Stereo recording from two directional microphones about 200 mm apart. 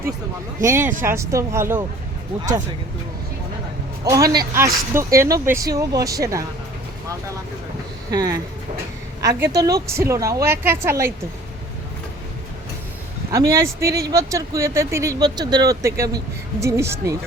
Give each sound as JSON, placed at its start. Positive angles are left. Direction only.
{"t": 0.6, "sound": "speech", "side_deg": -15}
{"t": 4.0, "sound": "speech", "side_deg": -15}
{"t": 8.1, "sound": "speech", "side_deg": -20}
{"t": 13.3, "sound": "speech", "side_deg": -15}